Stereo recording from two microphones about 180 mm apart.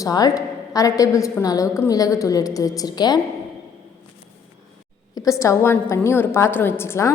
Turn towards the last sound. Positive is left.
turn(degrees=15)  # may be behind; listen again after turning